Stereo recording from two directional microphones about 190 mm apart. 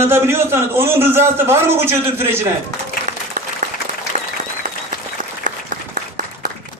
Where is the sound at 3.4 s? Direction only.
45° right (ahead or behind).